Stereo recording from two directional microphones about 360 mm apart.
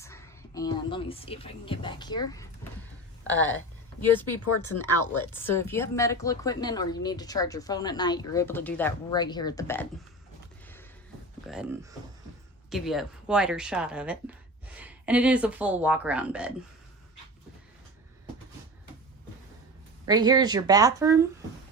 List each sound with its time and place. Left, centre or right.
0.0 s a woman's voice: centre
4.4 s speech: left
5.3 s a woman's voice: centre
11.4 s speech: centre
20.1 s speech: centre